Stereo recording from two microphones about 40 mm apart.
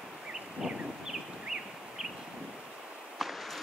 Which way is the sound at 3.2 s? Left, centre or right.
Centre.